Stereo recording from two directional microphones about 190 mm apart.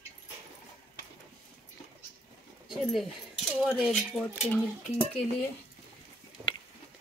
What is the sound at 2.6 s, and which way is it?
Speech, centre (ahead or behind).